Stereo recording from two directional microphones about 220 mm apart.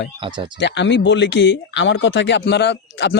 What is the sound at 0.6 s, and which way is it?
A man's voice, 55° left (ahead or behind).